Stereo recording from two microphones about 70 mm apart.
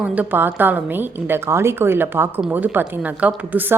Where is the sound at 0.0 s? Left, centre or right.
Right.